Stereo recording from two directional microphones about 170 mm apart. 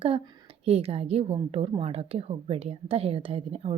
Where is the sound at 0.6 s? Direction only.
35° right (ahead or behind).